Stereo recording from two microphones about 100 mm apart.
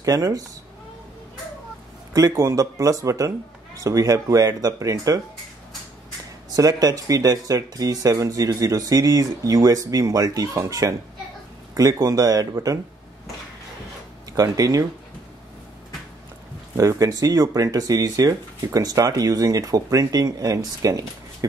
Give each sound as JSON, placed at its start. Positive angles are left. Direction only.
{"t": 0.0, "sound": "speech", "side_deg": -35}
{"t": 2.1, "sound": "speech", "side_deg": -30}
{"t": 6.5, "sound": "speech", "side_deg": -40}
{"t": 14.3, "sound": "speech", "side_deg": -35}
{"t": 16.7, "sound": "speech", "side_deg": -35}